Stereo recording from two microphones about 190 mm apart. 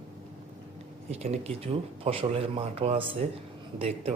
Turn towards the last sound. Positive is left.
turn(degrees=-30)  # may be behind; listen again after turning